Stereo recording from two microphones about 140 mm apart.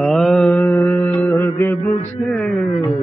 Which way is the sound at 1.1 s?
15° left (ahead or behind).